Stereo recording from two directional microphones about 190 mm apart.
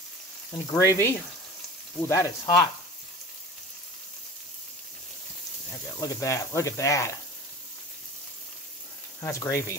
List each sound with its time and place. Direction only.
0.7 s speech: 15° left (ahead or behind)
5.9 s speech: 15° left (ahead or behind)
9.2 s speech: 15° left (ahead or behind)